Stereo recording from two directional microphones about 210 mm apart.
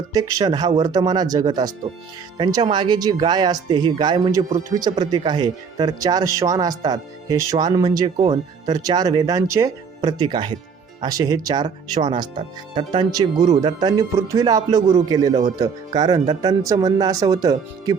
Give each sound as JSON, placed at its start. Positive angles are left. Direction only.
{"t": 0.1, "sound": "speech", "side_deg": -15}